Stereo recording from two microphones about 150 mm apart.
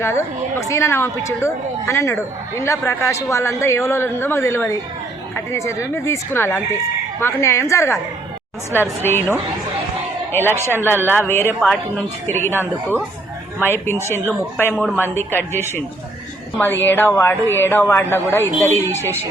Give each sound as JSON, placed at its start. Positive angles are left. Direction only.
{"t": 0.0, "sound": "a man's voice", "side_deg": 20}
{"t": 10.3, "sound": "a man's voice", "side_deg": 15}